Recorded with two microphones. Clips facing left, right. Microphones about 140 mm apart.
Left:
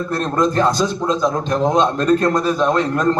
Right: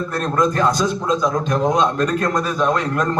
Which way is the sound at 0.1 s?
30° left (ahead or behind).